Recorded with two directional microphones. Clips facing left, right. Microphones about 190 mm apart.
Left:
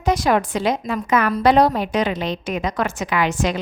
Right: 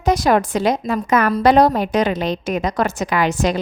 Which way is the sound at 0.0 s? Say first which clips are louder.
Right 2 dB; 40° right (ahead or behind).